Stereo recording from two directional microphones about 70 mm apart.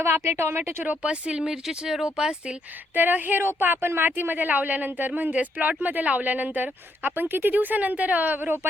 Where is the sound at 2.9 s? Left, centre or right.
Right.